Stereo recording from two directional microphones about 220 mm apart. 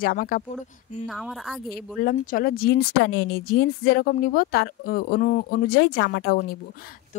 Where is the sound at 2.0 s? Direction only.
40° left (ahead or behind).